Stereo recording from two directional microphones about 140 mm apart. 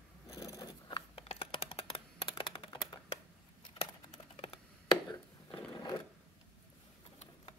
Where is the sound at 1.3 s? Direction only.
45° left (ahead or behind).